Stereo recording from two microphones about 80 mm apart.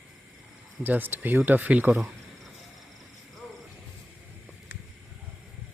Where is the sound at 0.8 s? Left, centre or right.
Right.